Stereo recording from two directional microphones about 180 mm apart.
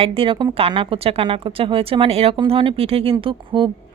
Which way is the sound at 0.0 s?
30° right (ahead or behind).